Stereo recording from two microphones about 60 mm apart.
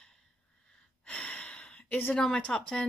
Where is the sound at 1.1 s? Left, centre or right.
Left.